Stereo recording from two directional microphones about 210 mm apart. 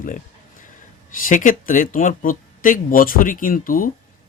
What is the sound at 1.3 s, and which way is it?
A man's voice, 40° left (ahead or behind).